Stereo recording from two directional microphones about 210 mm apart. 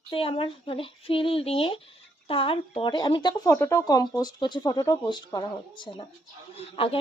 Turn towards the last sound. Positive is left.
turn(degrees=25)  # may be behind; listen again after turning